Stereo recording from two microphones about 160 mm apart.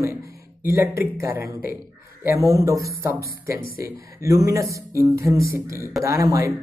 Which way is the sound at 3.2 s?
65° left (ahead or behind).